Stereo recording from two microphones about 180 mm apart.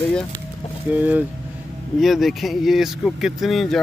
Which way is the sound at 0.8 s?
10° right (ahead or behind).